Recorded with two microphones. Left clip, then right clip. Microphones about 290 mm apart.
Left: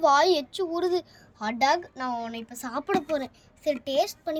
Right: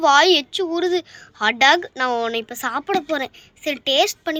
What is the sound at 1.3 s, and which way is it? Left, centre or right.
Speech, centre.